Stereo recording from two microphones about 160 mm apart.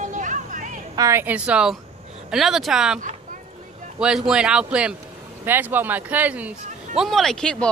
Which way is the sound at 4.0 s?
5° right (ahead or behind).